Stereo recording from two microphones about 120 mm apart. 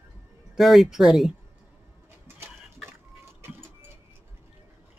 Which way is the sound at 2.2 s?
20° right (ahead or behind).